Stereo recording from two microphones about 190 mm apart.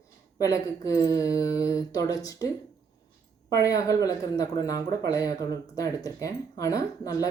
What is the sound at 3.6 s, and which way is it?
Speech, 15° left (ahead or behind).